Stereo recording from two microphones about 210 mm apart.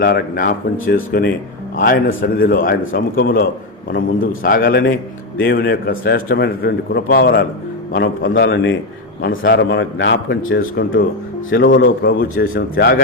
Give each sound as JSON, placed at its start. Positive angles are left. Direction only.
{"t": 0.0, "sound": "a man's voice", "side_deg": 45}
{"t": 4.4, "sound": "a man's voice", "side_deg": 40}
{"t": 7.9, "sound": "a man's voice", "side_deg": 60}
{"t": 10.6, "sound": "a man's voice", "side_deg": 45}
{"t": 11.5, "sound": "a man's voice", "side_deg": 60}
{"t": 11.8, "sound": "a man's voice", "side_deg": 45}